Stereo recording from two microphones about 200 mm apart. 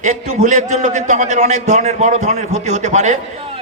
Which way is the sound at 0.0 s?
40° right (ahead or behind).